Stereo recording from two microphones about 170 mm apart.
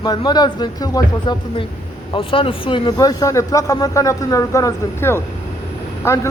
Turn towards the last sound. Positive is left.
turn(degrees=15)  # may be behind; listen again after turning